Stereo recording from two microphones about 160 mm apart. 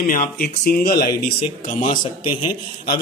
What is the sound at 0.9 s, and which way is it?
Speech, 70° left (ahead or behind).